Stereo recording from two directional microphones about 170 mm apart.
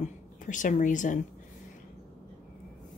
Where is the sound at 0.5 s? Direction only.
50° left (ahead or behind).